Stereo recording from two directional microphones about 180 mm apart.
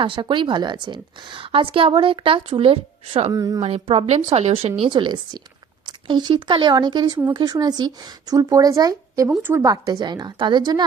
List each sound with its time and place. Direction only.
0.0 s a woman's voice: 25° right (ahead or behind)
3.3 s a woman's voice: 20° right (ahead or behind)
3.6 s a woman's voice: 35° right (ahead or behind)